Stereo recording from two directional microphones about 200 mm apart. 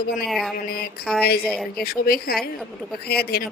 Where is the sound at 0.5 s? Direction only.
50° left (ahead or behind).